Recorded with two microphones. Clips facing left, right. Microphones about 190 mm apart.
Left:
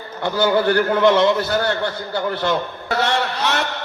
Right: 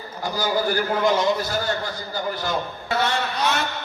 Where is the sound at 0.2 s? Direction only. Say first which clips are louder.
Left 6 dB; 65° left (ahead or behind).